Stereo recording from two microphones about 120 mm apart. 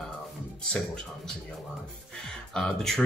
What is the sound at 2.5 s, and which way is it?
Speech, 5° left (ahead or behind).